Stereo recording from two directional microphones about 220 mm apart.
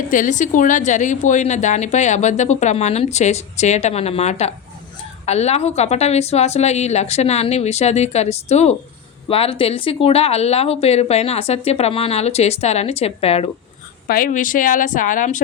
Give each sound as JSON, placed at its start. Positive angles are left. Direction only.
{"t": 0.1, "sound": "a woman's voice", "side_deg": 35}
{"t": 14.1, "sound": "a woman's voice", "side_deg": 40}